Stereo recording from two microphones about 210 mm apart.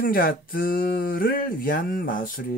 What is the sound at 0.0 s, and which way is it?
Speech, 45° left (ahead or behind).